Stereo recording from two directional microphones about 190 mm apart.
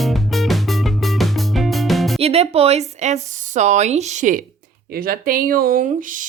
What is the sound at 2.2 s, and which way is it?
A woman's voice, 30° right (ahead or behind).